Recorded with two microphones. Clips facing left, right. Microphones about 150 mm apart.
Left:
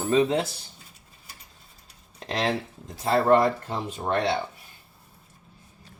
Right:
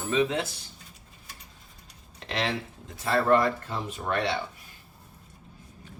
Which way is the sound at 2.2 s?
35° left (ahead or behind).